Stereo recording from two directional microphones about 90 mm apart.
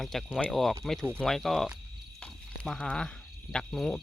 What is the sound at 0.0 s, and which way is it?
Speech, 5° left (ahead or behind).